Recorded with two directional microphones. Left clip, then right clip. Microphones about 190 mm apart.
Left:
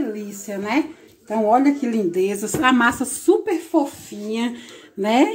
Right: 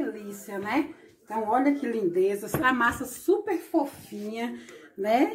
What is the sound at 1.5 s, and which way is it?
Speech, 50° left (ahead or behind).